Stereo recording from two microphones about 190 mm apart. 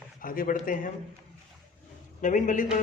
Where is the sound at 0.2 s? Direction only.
45° left (ahead or behind).